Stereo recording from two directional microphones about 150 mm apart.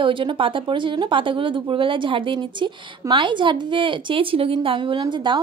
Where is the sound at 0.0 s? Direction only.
35° right (ahead or behind).